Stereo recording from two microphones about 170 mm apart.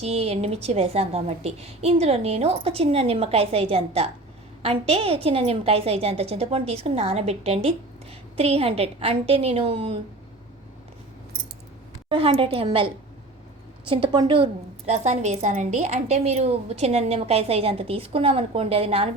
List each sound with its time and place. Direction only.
0.0 s a woman's voice: 35° right (ahead or behind)
12.0 s a woman's voice: 35° right (ahead or behind)